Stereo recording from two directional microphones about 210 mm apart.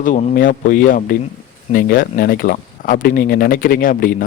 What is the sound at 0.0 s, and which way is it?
Speech, 40° left (ahead or behind).